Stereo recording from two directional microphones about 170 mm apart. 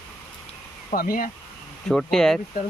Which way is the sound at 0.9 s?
60° left (ahead or behind).